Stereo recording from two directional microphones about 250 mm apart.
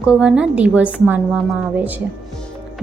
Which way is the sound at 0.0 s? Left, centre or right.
Centre.